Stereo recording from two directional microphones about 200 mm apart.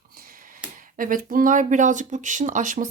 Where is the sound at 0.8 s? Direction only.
45° right (ahead or behind).